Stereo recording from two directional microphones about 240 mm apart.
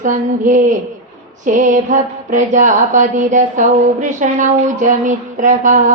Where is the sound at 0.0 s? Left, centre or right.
Right.